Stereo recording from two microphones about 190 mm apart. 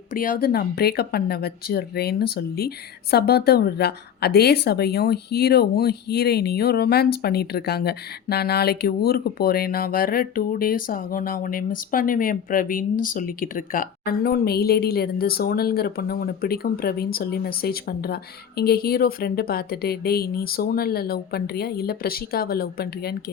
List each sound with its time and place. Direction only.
0.1 s speech: 45° left (ahead or behind)